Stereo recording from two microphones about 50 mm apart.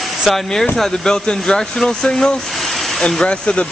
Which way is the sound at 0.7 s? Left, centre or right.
Centre.